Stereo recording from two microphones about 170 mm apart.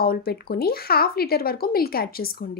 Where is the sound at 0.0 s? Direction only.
65° left (ahead or behind).